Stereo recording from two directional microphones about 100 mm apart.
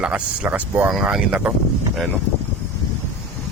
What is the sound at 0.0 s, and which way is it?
Speech, 15° right (ahead or behind).